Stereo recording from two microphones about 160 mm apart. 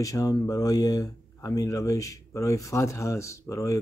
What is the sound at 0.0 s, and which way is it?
Speech, 20° left (ahead or behind).